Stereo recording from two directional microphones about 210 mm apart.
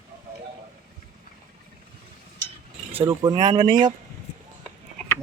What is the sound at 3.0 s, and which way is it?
Speech, 20° right (ahead or behind).